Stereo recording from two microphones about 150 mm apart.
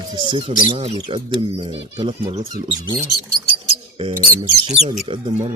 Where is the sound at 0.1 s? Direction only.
30° right (ahead or behind).